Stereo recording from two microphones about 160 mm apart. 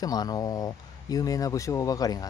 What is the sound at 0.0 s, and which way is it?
Speech, 25° left (ahead or behind).